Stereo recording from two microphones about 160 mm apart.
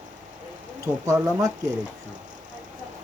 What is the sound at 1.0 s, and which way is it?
Speech, 20° right (ahead or behind).